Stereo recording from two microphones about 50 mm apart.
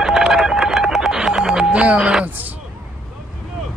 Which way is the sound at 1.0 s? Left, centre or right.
Centre.